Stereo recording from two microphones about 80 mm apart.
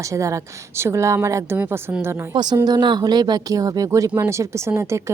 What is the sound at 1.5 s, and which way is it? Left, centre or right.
Speech, right.